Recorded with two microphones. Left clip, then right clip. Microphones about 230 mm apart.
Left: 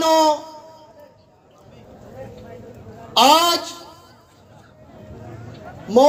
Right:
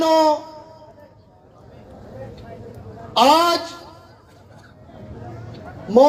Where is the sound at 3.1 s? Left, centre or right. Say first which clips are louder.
Left 1 dB; left.